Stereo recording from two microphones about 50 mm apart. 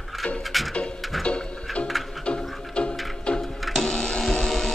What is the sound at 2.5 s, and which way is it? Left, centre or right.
Music, centre.